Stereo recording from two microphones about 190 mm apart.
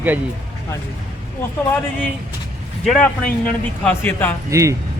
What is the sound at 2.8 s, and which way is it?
Speech, 5° left (ahead or behind).